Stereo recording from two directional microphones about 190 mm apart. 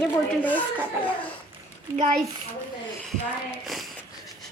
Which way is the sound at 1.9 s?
40° right (ahead or behind).